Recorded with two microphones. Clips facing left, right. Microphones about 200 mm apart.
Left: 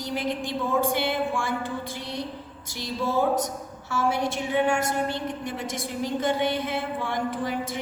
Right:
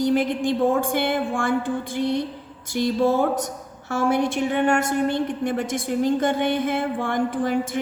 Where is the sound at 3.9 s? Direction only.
55° right (ahead or behind).